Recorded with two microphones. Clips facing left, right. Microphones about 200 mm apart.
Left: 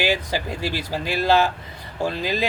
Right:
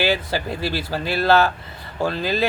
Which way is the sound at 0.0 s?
15° left (ahead or behind).